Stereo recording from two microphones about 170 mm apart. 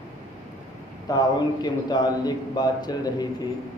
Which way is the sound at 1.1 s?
25° left (ahead or behind).